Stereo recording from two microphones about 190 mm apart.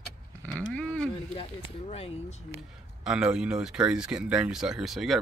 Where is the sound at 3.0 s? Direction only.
5° right (ahead or behind).